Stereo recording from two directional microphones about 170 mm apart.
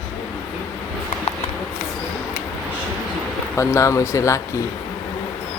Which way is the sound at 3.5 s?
15° left (ahead or behind).